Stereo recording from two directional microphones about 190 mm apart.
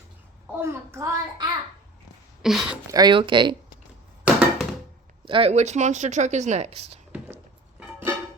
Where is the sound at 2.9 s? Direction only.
20° right (ahead or behind).